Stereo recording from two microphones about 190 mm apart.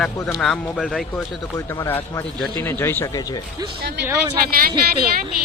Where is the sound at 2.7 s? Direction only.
10° left (ahead or behind).